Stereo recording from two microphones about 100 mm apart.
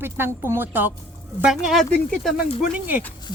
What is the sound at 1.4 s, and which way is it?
Speech, centre (ahead or behind).